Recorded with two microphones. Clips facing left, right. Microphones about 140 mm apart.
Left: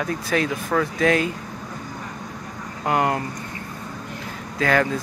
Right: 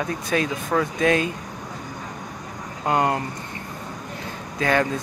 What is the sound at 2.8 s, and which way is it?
Speech, 25° right (ahead or behind).